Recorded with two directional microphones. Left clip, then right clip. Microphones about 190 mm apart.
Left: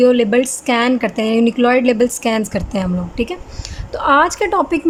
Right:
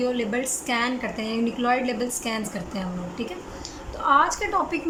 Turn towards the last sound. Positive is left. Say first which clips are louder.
# left 8 dB
turn(degrees=45)  # may be behind; listen again after turning